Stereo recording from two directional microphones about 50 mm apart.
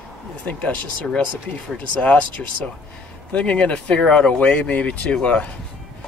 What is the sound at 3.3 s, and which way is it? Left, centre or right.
Speech, left.